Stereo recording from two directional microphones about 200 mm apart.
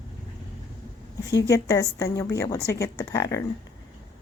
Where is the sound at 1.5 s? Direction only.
15° left (ahead or behind).